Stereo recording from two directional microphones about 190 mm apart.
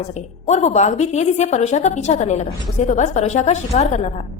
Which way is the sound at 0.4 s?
40° left (ahead or behind).